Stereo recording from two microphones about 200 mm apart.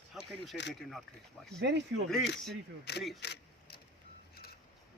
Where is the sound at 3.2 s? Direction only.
55° left (ahead or behind).